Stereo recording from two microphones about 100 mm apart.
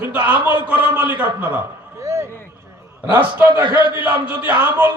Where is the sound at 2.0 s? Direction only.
30° right (ahead or behind).